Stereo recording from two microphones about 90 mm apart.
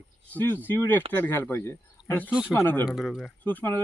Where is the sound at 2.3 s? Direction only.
10° right (ahead or behind).